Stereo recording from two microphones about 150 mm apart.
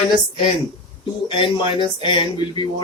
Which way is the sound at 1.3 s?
35° left (ahead or behind).